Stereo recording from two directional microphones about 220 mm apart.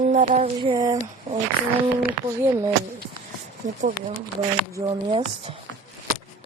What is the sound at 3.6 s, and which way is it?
Speech, 35° right (ahead or behind).